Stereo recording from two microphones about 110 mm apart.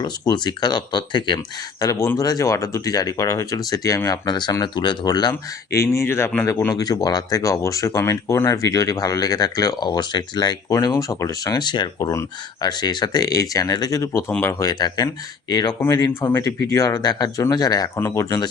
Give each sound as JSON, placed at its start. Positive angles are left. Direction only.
{"t": 0.0, "sound": "speech", "side_deg": 40}
{"t": 1.8, "sound": "speech", "side_deg": 30}
{"t": 5.3, "sound": "speech", "side_deg": 25}
{"t": 14.6, "sound": "speech", "side_deg": 40}
{"t": 15.8, "sound": "speech", "side_deg": 25}